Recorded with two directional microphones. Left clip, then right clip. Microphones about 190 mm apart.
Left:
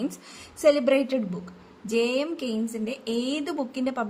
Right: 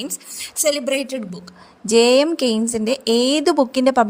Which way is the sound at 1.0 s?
40° right (ahead or behind).